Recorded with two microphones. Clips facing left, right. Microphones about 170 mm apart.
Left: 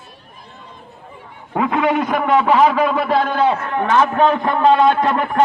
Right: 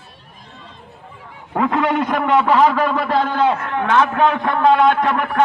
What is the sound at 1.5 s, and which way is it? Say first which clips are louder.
A man's voice: left 1 dB; 5° left (ahead or behind).